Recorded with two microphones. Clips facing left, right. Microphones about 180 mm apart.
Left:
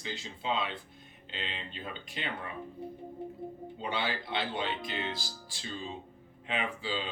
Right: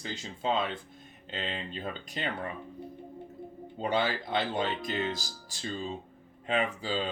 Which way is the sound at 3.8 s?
45° right (ahead or behind).